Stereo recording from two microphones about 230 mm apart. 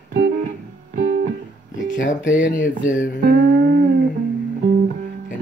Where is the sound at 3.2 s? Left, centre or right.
Right.